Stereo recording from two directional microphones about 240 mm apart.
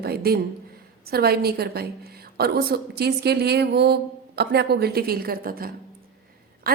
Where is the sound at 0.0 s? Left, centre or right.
Right.